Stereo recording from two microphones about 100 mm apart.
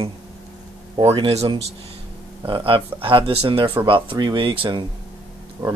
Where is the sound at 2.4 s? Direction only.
60° right (ahead or behind).